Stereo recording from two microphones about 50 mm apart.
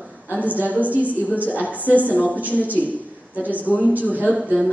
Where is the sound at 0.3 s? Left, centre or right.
Right.